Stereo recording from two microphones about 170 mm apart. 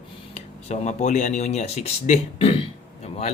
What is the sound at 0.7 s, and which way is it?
Speech, 45° left (ahead or behind).